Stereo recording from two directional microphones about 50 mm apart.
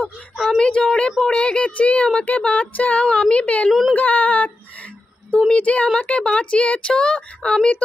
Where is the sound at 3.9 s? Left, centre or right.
Left.